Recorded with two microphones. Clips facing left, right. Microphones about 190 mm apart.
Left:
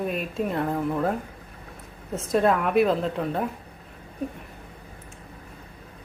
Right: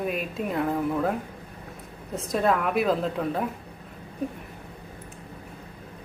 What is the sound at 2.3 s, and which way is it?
Speech, centre (ahead or behind).